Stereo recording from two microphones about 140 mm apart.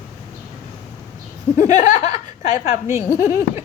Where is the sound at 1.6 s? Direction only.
60° left (ahead or behind).